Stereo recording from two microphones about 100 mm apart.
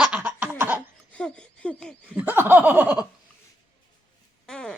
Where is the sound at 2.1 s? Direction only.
20° right (ahead or behind).